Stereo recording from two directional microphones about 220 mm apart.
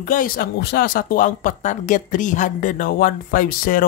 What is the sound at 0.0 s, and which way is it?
Speech, 40° left (ahead or behind).